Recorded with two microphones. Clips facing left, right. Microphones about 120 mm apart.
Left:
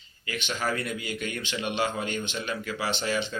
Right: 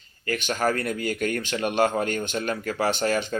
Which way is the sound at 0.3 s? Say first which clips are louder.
Right 6 dB; 45° right (ahead or behind).